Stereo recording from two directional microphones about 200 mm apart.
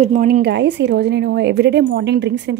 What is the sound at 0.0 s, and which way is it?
A woman's voice, 40° right (ahead or behind).